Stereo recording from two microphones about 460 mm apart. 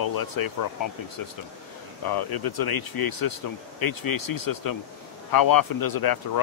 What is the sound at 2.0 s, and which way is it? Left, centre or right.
Speech, left.